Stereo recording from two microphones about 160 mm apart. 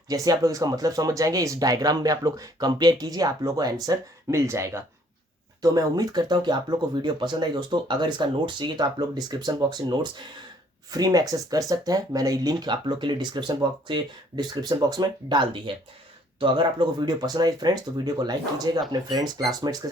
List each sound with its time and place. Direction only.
0.1 s speech: 20° right (ahead or behind)